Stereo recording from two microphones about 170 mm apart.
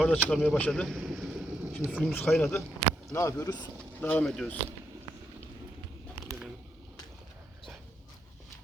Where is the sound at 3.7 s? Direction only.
5° left (ahead or behind).